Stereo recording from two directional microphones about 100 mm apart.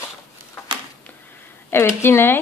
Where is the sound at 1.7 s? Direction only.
25° left (ahead or behind).